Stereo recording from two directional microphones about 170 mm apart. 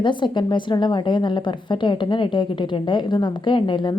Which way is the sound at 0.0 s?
30° left (ahead or behind).